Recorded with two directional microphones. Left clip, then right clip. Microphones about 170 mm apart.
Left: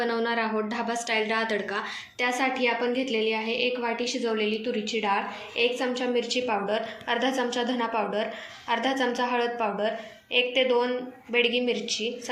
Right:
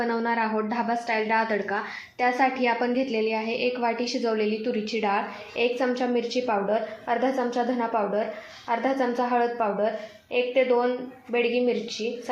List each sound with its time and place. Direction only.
0.1 s a woman's voice: 45° right (ahead or behind)
7.3 s a woman's voice: 25° right (ahead or behind)
9.1 s a woman's voice: 40° right (ahead or behind)